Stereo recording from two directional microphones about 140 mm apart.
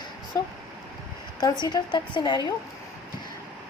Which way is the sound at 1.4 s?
30° left (ahead or behind).